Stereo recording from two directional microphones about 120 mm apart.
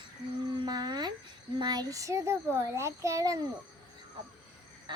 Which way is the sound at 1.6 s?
35° right (ahead or behind).